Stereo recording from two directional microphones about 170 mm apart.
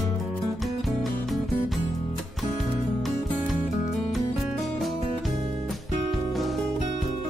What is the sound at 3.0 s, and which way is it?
Music, centre (ahead or behind).